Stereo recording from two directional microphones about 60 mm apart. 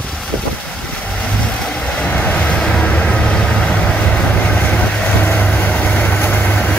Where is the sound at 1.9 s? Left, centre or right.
Left.